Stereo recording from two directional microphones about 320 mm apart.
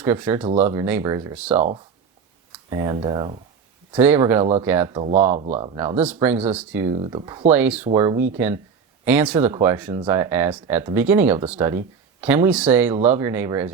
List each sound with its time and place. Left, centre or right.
0.0 s speech: centre
2.6 s speech: centre
6.0 s speech: centre
6.9 s speech: centre
7.5 s speech: centre